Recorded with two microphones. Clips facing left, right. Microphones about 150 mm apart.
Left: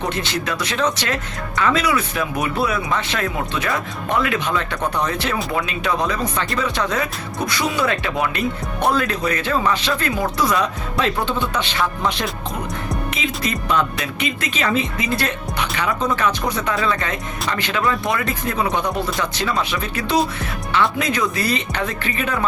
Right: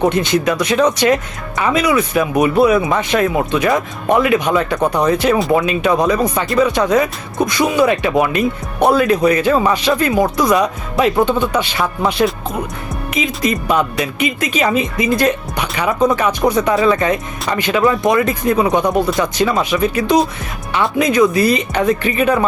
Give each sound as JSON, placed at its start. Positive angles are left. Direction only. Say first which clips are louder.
{"t": 0.1, "sound": "speech", "louder": "right 8 dB", "side_deg": -15}